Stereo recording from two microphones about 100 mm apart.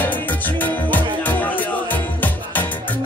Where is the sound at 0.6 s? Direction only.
15° left (ahead or behind).